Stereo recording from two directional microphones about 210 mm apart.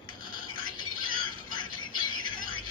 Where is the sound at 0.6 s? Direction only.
20° left (ahead or behind).